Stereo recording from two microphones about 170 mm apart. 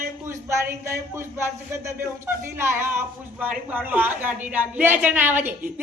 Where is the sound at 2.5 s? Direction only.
15° right (ahead or behind).